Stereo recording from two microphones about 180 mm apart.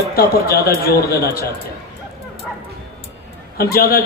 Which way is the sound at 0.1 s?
55° left (ahead or behind).